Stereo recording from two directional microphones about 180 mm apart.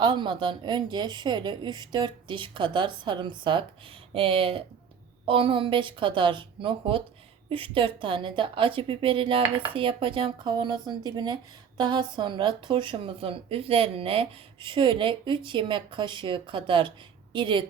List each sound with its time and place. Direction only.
0.0 s speech: 25° right (ahead or behind)